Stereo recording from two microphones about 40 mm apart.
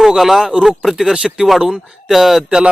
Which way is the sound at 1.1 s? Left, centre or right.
Centre.